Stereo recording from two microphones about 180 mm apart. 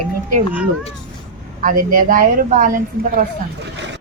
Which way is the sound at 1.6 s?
50° right (ahead or behind).